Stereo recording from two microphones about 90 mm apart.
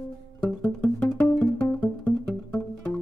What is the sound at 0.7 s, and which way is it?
Music, 15° left (ahead or behind).